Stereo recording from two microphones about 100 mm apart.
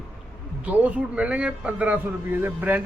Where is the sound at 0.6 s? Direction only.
15° right (ahead or behind).